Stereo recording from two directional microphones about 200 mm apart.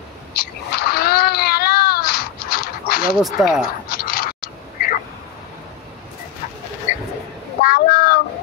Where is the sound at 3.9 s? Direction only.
45° left (ahead or behind).